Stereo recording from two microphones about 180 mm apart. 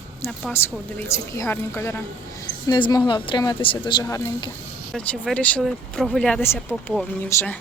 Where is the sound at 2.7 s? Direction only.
25° left (ahead or behind).